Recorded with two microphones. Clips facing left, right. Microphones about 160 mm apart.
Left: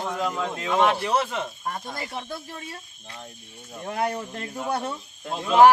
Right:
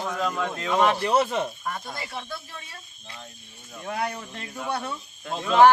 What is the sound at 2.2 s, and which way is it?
Speech, 40° left (ahead or behind).